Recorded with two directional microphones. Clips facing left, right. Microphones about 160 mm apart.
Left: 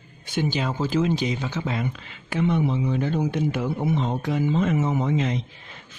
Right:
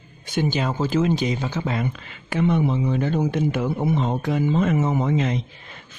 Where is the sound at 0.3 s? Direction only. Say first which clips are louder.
Right 2 dB; 50° right (ahead or behind).